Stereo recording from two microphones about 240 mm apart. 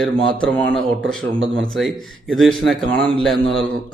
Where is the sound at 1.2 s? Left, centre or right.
Right.